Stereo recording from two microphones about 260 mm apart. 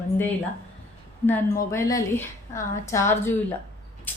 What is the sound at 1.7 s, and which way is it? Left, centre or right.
A woman's voice, centre.